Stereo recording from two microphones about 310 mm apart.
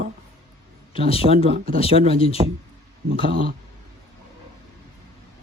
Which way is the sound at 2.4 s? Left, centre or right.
Centre.